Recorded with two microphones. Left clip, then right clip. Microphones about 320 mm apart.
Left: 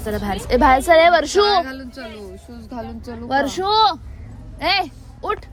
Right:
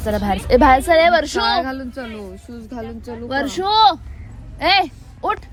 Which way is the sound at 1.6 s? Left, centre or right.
Centre.